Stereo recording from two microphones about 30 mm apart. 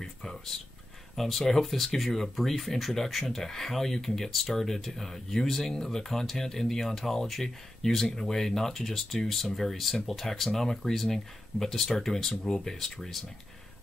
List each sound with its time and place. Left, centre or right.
0.0 s speech: centre
1.1 s speech: centre